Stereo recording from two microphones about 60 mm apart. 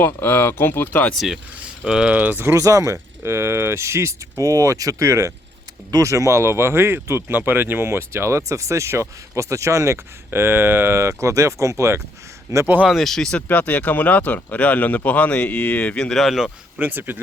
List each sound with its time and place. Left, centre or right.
0.0 s speech: left
1.1 s speech: centre
2.1 s speech: right
2.6 s speech: right
12.5 s speech: right
12.9 s speech: centre
13.3 s speech: left
16.0 s speech: centre
16.2 s speech: centre
16.7 s speech: right